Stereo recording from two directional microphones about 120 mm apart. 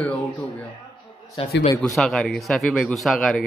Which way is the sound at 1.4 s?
50° left (ahead or behind).